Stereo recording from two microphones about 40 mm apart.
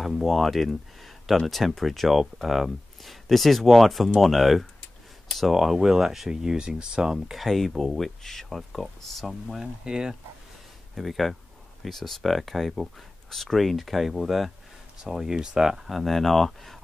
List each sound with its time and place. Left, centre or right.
0.0 s speech: centre
7.3 s speech: centre
9.6 s speech: centre
11.0 s speech: centre
16.0 s speech: centre